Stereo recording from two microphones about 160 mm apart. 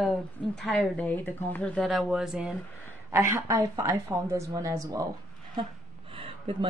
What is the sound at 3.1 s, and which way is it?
A woman's voice, 15° right (ahead or behind).